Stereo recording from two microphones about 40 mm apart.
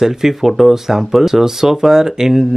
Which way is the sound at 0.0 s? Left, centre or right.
Centre.